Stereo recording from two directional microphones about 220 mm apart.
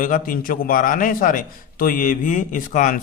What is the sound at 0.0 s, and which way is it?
A man's voice, 40° left (ahead or behind).